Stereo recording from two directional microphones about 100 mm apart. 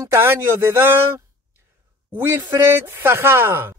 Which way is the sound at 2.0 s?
25° right (ahead or behind).